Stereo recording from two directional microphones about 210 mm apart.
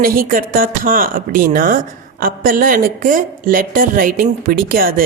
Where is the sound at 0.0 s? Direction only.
40° right (ahead or behind).